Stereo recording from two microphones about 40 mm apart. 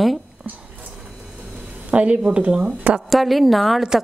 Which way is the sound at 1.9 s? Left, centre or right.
Right.